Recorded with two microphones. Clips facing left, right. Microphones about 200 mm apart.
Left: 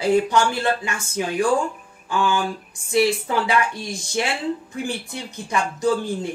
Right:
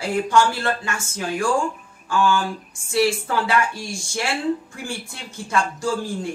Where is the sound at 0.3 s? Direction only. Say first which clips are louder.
Right 1 dB; 15° left (ahead or behind).